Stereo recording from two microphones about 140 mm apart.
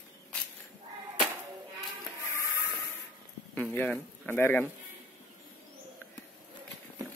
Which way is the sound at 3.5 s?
10° left (ahead or behind).